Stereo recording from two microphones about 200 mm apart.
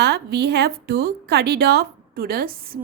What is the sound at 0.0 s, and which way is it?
A woman's voice, 55° right (ahead or behind).